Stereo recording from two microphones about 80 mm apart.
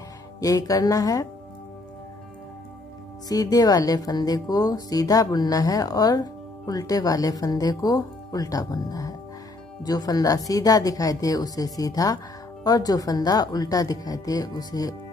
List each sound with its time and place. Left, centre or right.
0.4 s speech: left
3.3 s speech: left